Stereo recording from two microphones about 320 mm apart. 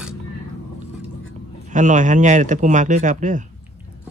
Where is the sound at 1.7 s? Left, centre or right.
Right.